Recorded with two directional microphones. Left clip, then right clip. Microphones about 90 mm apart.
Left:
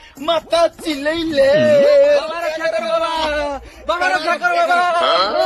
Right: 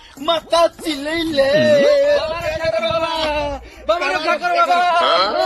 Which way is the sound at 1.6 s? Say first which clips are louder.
Right 1 dB; centre (ahead or behind).